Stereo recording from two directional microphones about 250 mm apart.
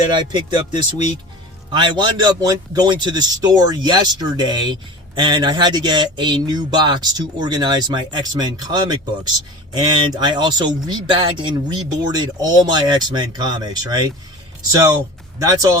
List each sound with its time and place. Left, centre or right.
0.2 s a man's voice: centre